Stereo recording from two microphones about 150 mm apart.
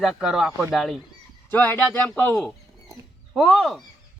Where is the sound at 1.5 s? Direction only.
10° left (ahead or behind).